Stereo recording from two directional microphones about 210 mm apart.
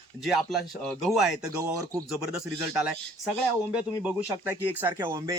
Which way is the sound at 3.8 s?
5° right (ahead or behind).